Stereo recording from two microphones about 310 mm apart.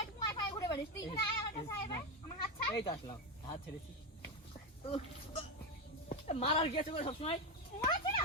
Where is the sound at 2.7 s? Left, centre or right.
Centre.